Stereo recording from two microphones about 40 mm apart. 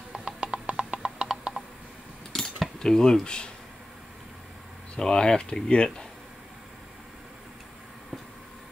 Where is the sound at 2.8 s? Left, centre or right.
Centre.